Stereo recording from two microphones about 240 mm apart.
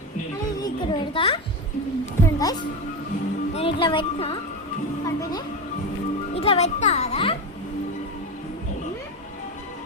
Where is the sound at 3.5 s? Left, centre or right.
Left.